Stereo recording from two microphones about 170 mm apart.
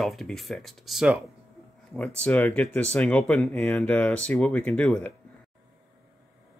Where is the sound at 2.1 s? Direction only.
10° left (ahead or behind).